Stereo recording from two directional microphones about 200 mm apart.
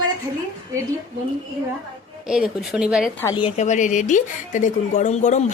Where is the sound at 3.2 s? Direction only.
20° left (ahead or behind).